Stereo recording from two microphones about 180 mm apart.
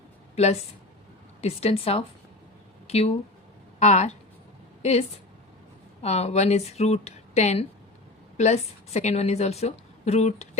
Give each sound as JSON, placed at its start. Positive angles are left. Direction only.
{"t": 0.3, "sound": "a woman's voice", "side_deg": 35}